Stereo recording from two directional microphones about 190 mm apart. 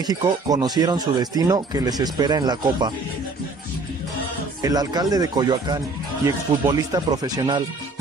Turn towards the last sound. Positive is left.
turn(degrees=-20)  # may be behind; listen again after turning